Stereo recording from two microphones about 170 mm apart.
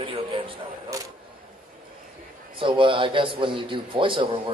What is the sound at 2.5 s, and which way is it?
A man's voice, 30° right (ahead or behind).